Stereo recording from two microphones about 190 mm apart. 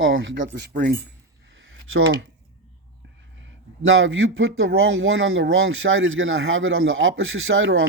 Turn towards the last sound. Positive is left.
turn(degrees=-90)